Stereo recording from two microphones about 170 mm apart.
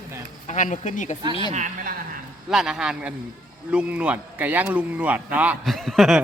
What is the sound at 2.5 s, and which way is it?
Speech, 5° right (ahead or behind).